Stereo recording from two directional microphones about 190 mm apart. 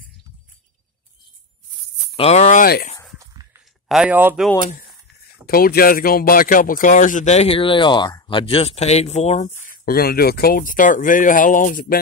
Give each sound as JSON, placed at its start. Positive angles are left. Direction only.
{"t": 2.1, "sound": "speech", "side_deg": 35}
{"t": 2.6, "sound": "speech", "side_deg": 50}
{"t": 3.9, "sound": "speech", "side_deg": -5}
{"t": 5.5, "sound": "speech", "side_deg": 50}